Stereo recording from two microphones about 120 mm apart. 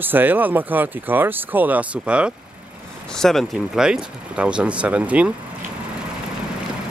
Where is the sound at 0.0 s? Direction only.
15° right (ahead or behind).